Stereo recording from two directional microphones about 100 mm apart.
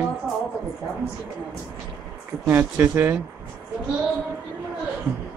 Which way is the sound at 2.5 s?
20° right (ahead or behind).